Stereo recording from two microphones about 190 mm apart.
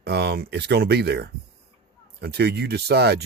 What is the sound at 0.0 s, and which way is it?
Speech, 60° right (ahead or behind).